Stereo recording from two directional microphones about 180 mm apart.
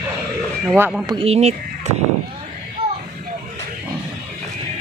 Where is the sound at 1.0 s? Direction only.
30° right (ahead or behind).